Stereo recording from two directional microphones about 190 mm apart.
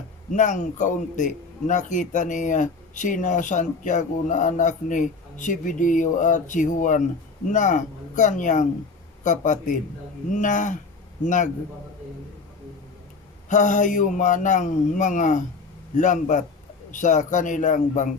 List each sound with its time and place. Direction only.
0.3 s a man's voice: 40° left (ahead or behind)
13.5 s a man's voice: 40° left (ahead or behind)